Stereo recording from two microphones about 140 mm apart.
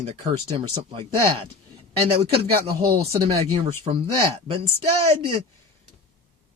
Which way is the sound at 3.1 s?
25° right (ahead or behind).